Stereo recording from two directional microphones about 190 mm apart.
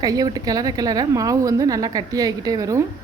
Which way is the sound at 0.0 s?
20° right (ahead or behind).